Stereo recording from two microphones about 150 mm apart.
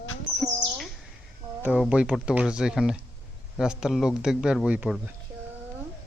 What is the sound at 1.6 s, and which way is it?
Speech, 5° right (ahead or behind).